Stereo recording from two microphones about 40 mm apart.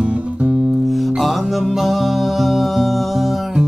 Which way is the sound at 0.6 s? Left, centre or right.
Centre.